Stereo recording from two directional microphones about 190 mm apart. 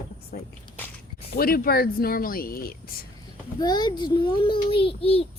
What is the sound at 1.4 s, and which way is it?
Speech, 50° left (ahead or behind).